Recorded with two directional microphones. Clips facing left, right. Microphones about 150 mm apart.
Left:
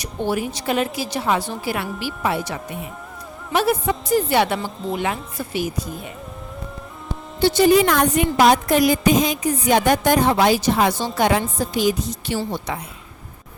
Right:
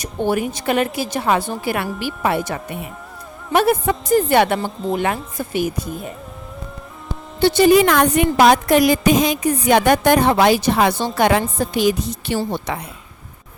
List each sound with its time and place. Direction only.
0.0 s a woman's voice: 50° right (ahead or behind)
7.4 s a woman's voice: 65° right (ahead or behind)